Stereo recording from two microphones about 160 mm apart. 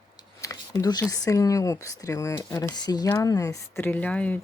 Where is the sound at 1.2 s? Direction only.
20° left (ahead or behind).